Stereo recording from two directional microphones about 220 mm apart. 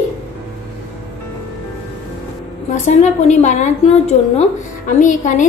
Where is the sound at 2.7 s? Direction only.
30° left (ahead or behind).